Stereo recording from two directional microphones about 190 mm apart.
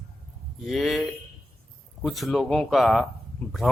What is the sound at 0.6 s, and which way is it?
Speech, centre (ahead or behind).